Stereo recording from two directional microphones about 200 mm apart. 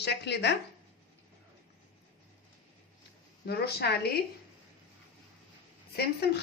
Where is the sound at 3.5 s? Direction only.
50° left (ahead or behind).